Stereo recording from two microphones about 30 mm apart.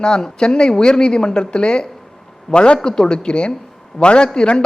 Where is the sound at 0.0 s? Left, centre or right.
Left.